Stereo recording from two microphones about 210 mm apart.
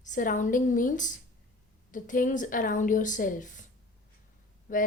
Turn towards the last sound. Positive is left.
turn(degrees=40)  # may be behind; listen again after turning